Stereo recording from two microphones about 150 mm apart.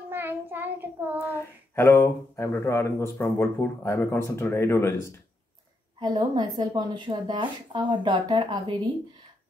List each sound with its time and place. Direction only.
0.1 s child singing: 15° right (ahead or behind)
1.3 s speech: 15° left (ahead or behind)
5.9 s a woman's voice: 30° right (ahead or behind)